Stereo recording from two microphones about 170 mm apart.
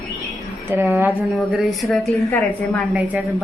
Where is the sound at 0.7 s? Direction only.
10° right (ahead or behind).